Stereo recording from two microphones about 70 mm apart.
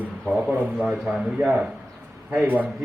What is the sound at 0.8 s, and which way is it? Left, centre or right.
Speech, centre.